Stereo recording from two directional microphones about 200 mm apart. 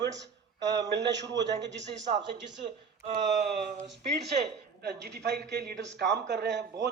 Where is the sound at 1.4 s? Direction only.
60° right (ahead or behind).